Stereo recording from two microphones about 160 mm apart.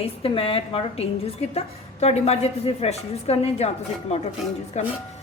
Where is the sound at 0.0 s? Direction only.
35° left (ahead or behind).